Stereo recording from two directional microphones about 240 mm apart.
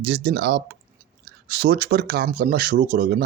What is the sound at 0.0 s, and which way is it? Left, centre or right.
Speech, right.